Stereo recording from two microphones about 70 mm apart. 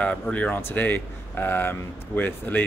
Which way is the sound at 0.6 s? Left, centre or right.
Left.